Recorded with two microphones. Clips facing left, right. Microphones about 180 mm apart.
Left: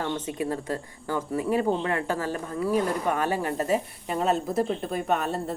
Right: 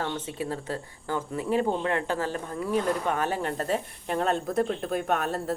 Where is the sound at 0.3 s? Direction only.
45° left (ahead or behind).